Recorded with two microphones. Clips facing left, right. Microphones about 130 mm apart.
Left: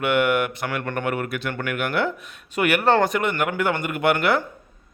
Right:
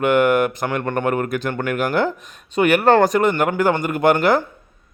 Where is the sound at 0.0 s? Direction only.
40° right (ahead or behind).